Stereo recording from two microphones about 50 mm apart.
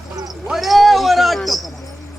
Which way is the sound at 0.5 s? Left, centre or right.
Centre.